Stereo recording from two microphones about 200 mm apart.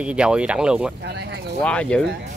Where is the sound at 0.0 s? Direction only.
5° right (ahead or behind).